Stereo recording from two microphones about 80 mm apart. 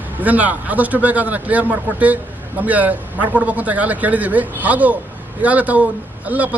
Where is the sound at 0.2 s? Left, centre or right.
Centre.